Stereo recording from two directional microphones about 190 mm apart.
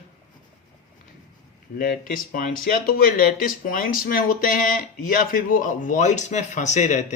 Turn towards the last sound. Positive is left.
turn(degrees=40)  # may be behind; listen again after turning